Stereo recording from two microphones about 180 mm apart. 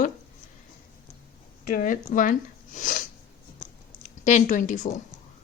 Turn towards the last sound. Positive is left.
turn(degrees=45)  # may be behind; listen again after turning